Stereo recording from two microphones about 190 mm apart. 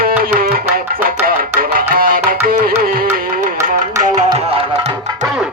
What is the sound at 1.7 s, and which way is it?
Music, 50° right (ahead or behind).